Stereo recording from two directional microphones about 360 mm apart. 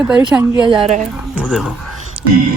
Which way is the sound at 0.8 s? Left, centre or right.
Centre.